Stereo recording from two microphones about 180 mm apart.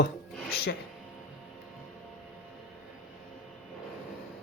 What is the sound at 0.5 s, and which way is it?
Speech, 60° left (ahead or behind).